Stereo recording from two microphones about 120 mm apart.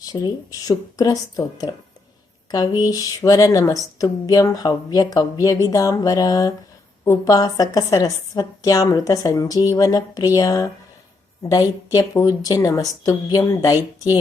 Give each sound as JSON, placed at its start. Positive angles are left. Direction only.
{"t": 0.0, "sound": "a woman's voice", "side_deg": 35}
{"t": 7.0, "sound": "a woman's voice", "side_deg": 20}
{"t": 7.3, "sound": "a woman's voice", "side_deg": 35}